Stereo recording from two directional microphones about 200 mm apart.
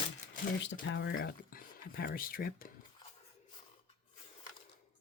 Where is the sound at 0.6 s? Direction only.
60° left (ahead or behind).